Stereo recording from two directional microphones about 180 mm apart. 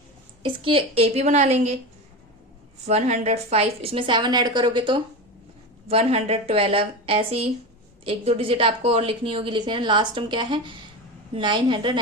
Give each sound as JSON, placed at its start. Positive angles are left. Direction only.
{"t": 0.4, "sound": "a woman's voice", "side_deg": -30}
{"t": 2.8, "sound": "a woman's voice", "side_deg": -35}